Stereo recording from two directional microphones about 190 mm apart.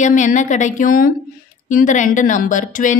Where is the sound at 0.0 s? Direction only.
40° left (ahead or behind).